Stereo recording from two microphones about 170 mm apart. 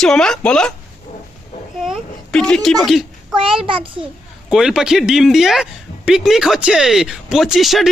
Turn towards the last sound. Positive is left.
turn(degrees=0)  # may be behind; listen again after turning